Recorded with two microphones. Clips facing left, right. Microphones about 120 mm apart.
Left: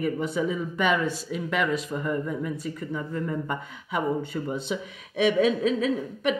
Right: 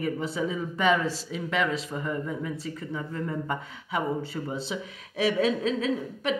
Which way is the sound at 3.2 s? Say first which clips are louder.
Left 1 dB; 30° right (ahead or behind).